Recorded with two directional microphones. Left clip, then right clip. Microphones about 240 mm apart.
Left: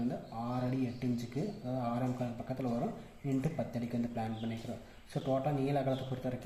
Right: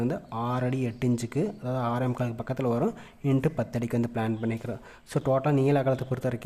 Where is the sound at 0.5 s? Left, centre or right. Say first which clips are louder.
Right 7 dB; right.